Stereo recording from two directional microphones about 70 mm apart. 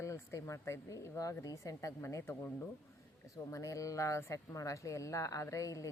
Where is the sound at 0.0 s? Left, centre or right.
Left.